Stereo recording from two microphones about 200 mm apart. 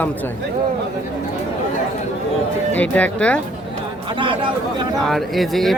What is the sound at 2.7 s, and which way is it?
Speech, 5° left (ahead or behind).